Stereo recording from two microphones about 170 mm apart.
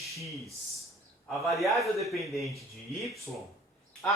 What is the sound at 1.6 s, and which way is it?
Speech, centre (ahead or behind).